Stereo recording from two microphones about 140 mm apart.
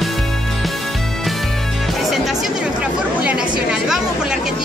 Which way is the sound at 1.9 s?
Centre (ahead or behind).